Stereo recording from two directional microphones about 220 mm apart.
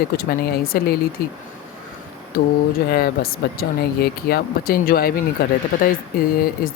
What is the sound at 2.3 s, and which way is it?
Speech, 40° left (ahead or behind).